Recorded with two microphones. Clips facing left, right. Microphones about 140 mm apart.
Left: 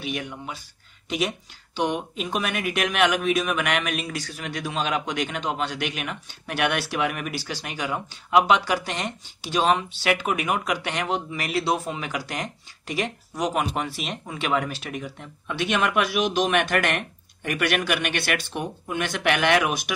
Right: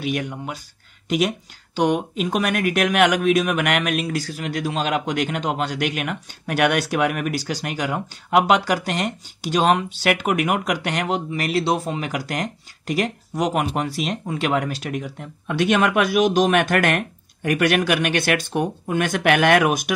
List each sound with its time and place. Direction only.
0.2 s a man's voice: 45° right (ahead or behind)
1.9 s a man's voice: 45° right (ahead or behind)